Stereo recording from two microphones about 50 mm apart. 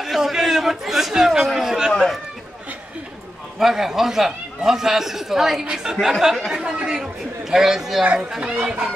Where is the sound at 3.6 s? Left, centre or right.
Centre.